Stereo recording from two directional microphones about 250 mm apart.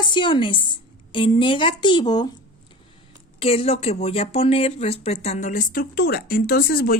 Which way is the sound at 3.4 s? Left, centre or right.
Left.